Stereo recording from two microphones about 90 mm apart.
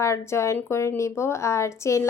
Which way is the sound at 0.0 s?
30° left (ahead or behind).